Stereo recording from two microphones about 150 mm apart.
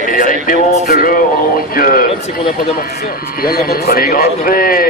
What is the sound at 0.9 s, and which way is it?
A man's voice, 75° left (ahead or behind).